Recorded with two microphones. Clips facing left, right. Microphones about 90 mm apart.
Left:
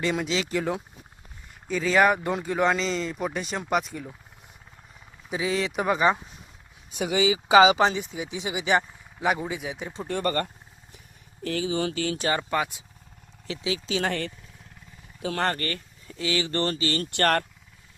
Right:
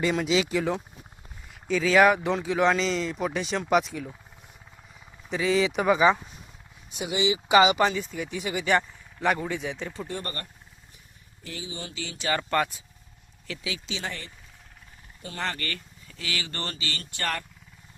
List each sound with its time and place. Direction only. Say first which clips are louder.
0.0 s speech: right 2 dB; centre (ahead or behind)
5.3 s speech: right 3 dB; 5° left (ahead or behind)
7.4 s speech: left 3 dB; 25° left (ahead or behind); by 9.8 s 10° left (ahead or behind)
10.1 s speech: left 9 dB; 65° left (ahead or behind)
12.5 s speech: right 1 dB; 10° left (ahead or behind)
13.5 s speech: left 5 dB; 30° left (ahead or behind)
14.0 s speech: left 8 dB; 65° left (ahead or behind)
15.2 s speech: left 7 dB; 90° left
15.5 s speech: left 3 dB; 30° left (ahead or behind)
17.1 s speech: left 8 dB; 65° left (ahead or behind)